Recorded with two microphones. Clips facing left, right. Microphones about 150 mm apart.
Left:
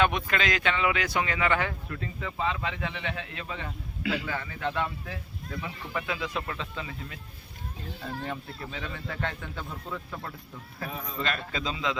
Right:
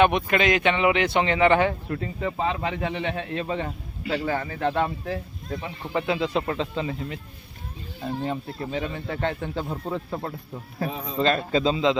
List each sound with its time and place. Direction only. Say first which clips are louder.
0.0 s speech: right 6 dB; 20° right (ahead or behind); by 5.5 s 40° right (ahead or behind)
5.9 s speech: right 9 dB; 25° right (ahead or behind)